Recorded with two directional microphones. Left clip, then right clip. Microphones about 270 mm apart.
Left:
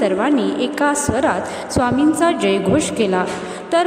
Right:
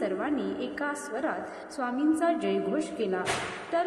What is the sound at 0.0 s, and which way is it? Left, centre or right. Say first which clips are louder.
A woman's voice: left 13 dB; left.